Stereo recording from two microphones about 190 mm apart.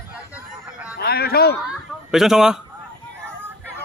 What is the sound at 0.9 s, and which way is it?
Speech, 55° left (ahead or behind).